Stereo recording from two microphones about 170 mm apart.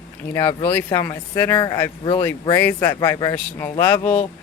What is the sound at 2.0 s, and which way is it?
Speech, 30° left (ahead or behind).